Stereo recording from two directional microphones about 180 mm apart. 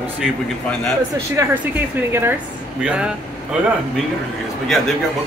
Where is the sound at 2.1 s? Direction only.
15° right (ahead or behind).